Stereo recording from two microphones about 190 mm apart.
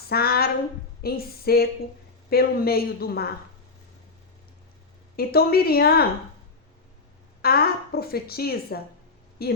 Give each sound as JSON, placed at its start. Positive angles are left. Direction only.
{"t": 0.1, "sound": "a woman's voice", "side_deg": 55}
{"t": 5.1, "sound": "a woman's voice", "side_deg": 55}
{"t": 7.4, "sound": "a woman's voice", "side_deg": 55}